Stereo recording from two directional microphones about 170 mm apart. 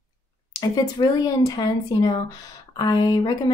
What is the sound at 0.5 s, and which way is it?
Speech, 20° left (ahead or behind).